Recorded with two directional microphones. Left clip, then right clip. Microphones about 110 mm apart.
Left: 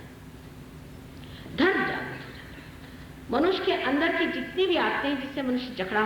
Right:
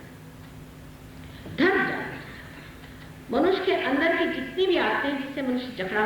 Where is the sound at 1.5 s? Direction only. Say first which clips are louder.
Right 2 dB; 35° left (ahead or behind).